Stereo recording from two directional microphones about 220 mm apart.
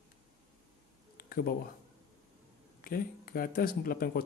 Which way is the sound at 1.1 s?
40° left (ahead or behind).